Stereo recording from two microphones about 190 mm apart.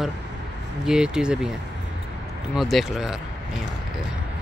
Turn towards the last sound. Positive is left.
turn(degrees=0)  # may be behind; listen again after turning